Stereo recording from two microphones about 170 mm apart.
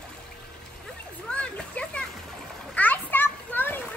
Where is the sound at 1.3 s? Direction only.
5° left (ahead or behind).